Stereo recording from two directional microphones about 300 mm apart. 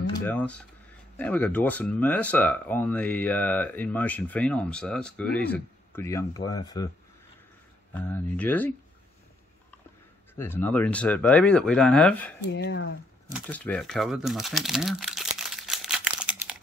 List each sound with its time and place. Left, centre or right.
0.2 s speech: centre
7.9 s speech: centre
10.3 s speech: centre
12.4 s speech: left
13.3 s crumpling: centre